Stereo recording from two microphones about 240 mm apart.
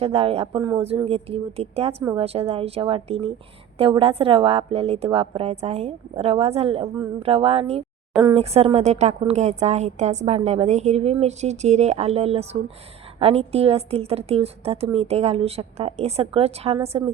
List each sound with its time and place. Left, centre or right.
0.0 s speech: right